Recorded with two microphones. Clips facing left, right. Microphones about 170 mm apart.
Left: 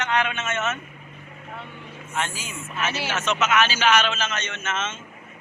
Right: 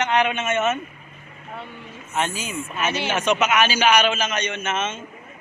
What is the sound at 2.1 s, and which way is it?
A man's voice, 20° right (ahead or behind).